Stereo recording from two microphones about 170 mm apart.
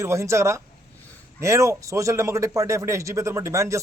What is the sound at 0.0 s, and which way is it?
Speech, 15° right (ahead or behind).